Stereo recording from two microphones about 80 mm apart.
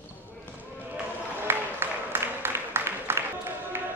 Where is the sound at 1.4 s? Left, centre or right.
Right.